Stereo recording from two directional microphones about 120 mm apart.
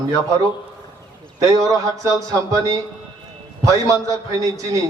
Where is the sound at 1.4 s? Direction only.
30° right (ahead or behind).